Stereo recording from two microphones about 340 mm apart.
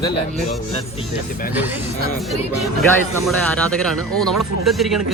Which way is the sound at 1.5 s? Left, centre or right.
Centre.